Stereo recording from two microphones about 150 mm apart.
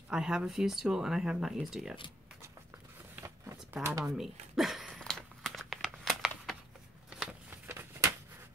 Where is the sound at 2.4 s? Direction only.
15° right (ahead or behind).